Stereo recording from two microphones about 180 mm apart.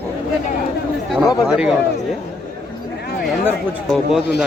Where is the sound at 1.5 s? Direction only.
5° right (ahead or behind).